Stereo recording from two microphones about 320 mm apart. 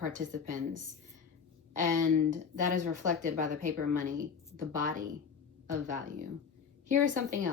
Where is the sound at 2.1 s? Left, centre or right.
Right.